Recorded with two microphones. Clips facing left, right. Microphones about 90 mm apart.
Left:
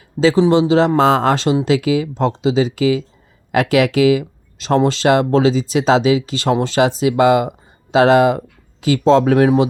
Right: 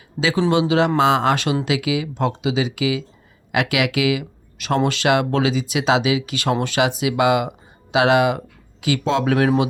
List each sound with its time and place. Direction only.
0.7 s speech: 35° left (ahead or behind)